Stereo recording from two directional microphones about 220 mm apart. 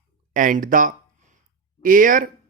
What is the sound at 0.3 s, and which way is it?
A man's voice, 35° right (ahead or behind).